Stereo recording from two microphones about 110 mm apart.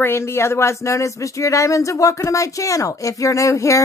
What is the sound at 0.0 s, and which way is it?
Speech, 25° left (ahead or behind).